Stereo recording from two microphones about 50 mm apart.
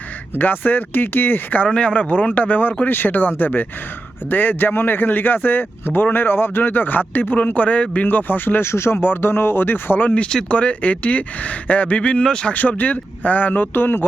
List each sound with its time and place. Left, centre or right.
0.3 s speech: left
1.5 s speech: left
8.7 s speech: left
10.2 s speech: centre
12.5 s speech: left